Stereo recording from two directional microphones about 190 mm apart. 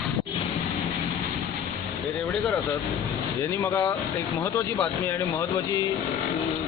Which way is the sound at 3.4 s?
15° left (ahead or behind).